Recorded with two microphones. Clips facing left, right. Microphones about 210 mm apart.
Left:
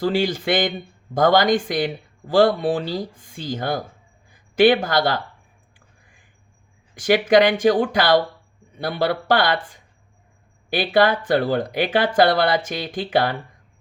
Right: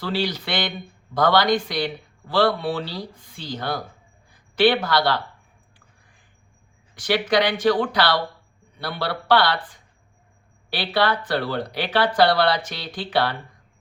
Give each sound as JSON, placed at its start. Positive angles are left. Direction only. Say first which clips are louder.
{"t": 0.0, "sound": "speech", "louder": "left 5 dB", "side_deg": 45}
{"t": 7.0, "sound": "speech", "louder": "left 5 dB", "side_deg": 45}